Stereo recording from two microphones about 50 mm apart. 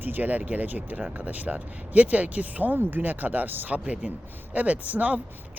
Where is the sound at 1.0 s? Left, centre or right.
Right.